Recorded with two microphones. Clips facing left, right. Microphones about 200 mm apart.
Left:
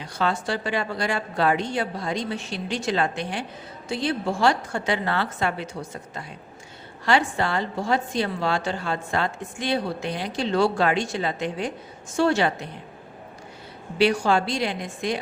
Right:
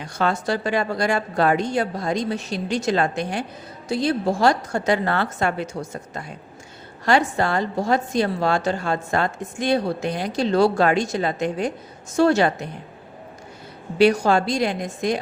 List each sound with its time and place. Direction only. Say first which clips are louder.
0.0 s a woman's voice: right 3 dB; 45° right (ahead or behind)
14.0 s a woman's voice: right 4 dB; 40° right (ahead or behind)